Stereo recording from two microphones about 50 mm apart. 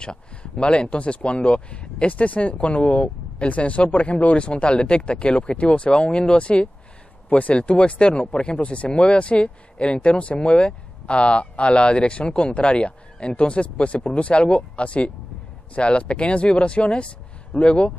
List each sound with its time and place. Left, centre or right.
0.0 s speech: centre